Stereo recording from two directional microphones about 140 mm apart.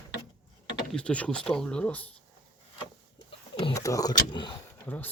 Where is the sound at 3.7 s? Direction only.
25° left (ahead or behind).